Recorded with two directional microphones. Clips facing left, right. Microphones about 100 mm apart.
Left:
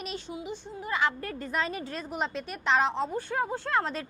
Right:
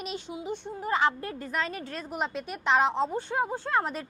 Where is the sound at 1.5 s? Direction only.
5° left (ahead or behind); by 4.0 s 10° right (ahead or behind).